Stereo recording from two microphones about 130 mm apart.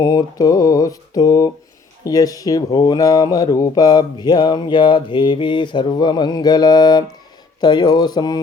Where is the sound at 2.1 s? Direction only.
30° left (ahead or behind).